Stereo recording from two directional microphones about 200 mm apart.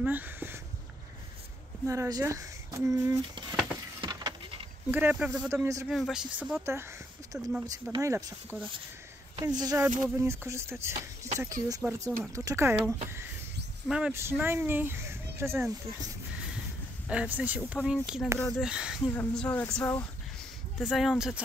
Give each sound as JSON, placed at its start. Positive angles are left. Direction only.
{"t": 0.0, "sound": "a sound", "side_deg": -10}
{"t": 1.9, "sound": "speech", "side_deg": -15}
{"t": 4.0, "sound": "a sound", "side_deg": -20}
{"t": 4.9, "sound": "speech", "side_deg": -5}
{"t": 5.5, "sound": "speech", "side_deg": -15}
{"t": 5.9, "sound": "speech", "side_deg": 0}
{"t": 17.1, "sound": "speech", "side_deg": -5}
{"t": 19.1, "sound": "speech", "side_deg": 5}
{"t": 20.7, "sound": "speech", "side_deg": 0}